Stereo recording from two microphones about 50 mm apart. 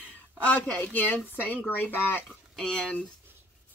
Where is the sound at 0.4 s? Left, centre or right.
Left.